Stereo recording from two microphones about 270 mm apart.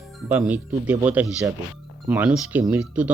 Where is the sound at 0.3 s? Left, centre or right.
Centre.